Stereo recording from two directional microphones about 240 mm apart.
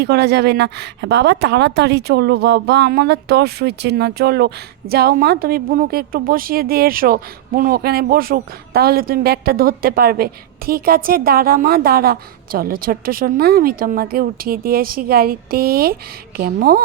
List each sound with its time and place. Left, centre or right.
0.0 s a woman's voice: right